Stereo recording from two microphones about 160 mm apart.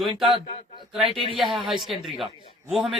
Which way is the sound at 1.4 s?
Centre (ahead or behind).